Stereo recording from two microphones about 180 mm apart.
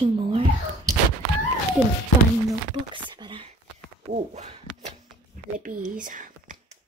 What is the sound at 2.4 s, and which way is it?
Speech, 25° right (ahead or behind).